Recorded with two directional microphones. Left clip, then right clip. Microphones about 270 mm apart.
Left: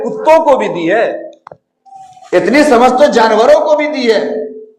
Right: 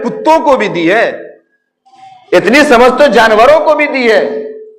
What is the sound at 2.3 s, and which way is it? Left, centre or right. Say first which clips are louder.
A man's voice: right 2 dB; right.